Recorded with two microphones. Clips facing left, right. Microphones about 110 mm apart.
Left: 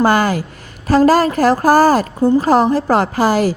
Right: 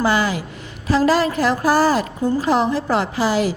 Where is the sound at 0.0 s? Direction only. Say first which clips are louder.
Left 5 dB; 50° left (ahead or behind).